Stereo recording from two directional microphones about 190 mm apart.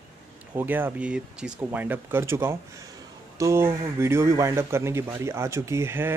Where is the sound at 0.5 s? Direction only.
10° right (ahead or behind).